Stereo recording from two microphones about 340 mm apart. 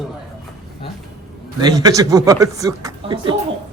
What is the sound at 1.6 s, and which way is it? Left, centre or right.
A man's voice, centre.